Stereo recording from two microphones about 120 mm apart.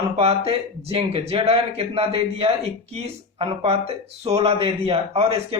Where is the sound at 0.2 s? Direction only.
60° right (ahead or behind).